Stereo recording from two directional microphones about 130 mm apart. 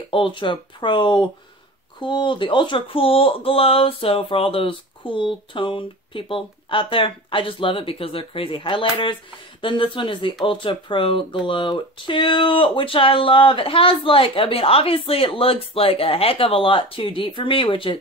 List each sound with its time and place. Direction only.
0.1 s speech: 40° left (ahead or behind)